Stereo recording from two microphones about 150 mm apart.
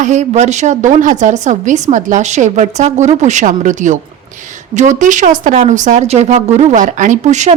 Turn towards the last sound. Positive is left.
turn(degrees=-50)  # may be behind; listen again after turning